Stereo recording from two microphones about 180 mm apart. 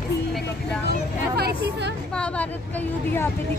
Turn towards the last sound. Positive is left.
turn(degrees=10)  # may be behind; listen again after turning